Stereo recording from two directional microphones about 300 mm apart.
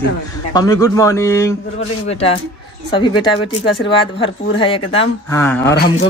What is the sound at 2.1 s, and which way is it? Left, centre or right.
Speech, centre.